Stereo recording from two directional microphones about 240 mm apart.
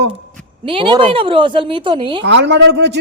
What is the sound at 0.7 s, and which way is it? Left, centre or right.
Speech, right.